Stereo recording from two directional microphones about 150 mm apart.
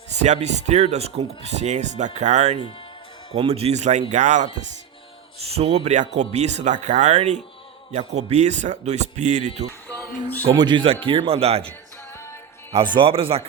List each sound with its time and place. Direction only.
0.2 s speech: 50° right (ahead or behind)
5.4 s speech: 45° right (ahead or behind)
10.5 s speech: 30° right (ahead or behind)
12.1 s music: 15° left (ahead or behind)
12.7 s speech: 35° right (ahead or behind)